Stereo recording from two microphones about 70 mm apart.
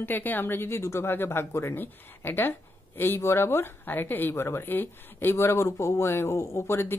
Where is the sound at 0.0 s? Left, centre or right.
Left.